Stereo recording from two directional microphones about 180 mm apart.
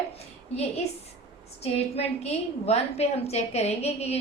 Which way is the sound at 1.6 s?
35° left (ahead or behind).